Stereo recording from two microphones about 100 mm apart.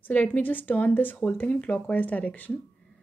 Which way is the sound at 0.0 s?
20° left (ahead or behind).